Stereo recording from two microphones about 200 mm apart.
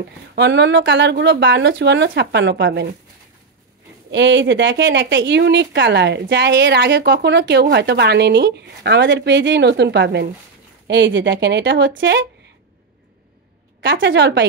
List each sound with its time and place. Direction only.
0.4 s speech: 60° right (ahead or behind)
4.1 s speech: 65° right (ahead or behind)
14.0 s speech: 60° right (ahead or behind)